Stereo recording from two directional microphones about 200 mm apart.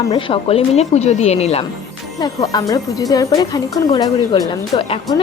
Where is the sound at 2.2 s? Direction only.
20° left (ahead or behind).